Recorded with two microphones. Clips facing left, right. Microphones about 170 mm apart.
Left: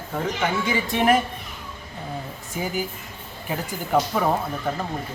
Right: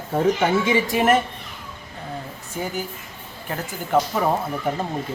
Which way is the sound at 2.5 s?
Centre (ahead or behind).